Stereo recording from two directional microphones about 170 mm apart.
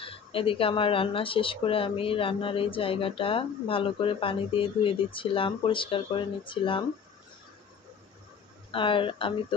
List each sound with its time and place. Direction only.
0.0 s speech: 30° left (ahead or behind)
8.7 s speech: 30° left (ahead or behind)